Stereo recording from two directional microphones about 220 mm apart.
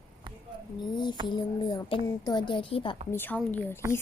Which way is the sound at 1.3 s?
20° left (ahead or behind).